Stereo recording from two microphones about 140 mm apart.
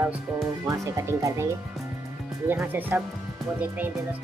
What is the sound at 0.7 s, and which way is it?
Speech, 20° right (ahead or behind).